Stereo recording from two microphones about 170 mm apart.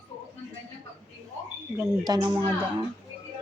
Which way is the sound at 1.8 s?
20° right (ahead or behind).